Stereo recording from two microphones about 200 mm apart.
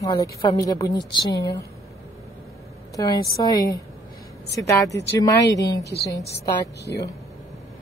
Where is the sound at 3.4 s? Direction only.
20° left (ahead or behind).